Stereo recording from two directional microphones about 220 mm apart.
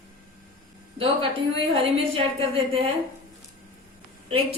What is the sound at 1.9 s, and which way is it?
Speech, 25° right (ahead or behind).